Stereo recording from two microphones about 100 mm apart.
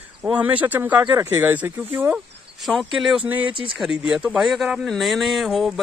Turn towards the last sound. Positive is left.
turn(degrees=0)  # may be behind; listen again after turning